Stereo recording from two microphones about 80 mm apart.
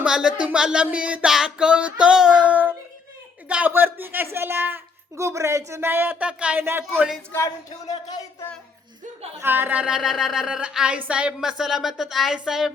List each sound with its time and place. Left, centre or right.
0.0 s child singing: centre
3.7 s a man's voice: right
5.1 s a woman's voice: right; by 6.6 s centre
6.6 s a man's voice: right
9.4 s speech: right; by 12.7 s centre